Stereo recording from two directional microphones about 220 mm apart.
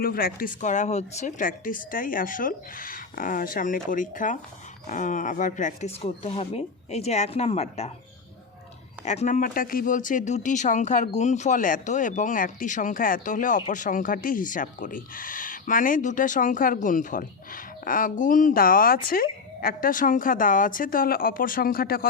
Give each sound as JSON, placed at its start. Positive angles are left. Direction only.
{"t": 0.0, "sound": "speech", "side_deg": 40}
{"t": 9.0, "sound": "speech", "side_deg": 35}